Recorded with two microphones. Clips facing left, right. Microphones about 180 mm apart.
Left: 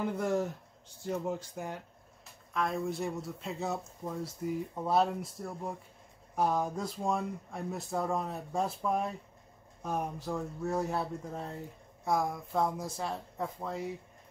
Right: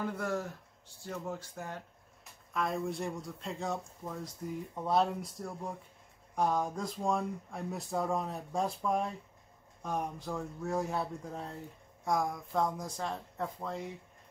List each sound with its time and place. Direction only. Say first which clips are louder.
0.0 s speech: left 4 dB; 20° left (ahead or behind)
2.5 s speech: left 1 dB; centre (ahead or behind)